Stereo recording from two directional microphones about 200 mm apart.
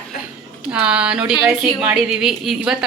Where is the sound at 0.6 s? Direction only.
5° right (ahead or behind).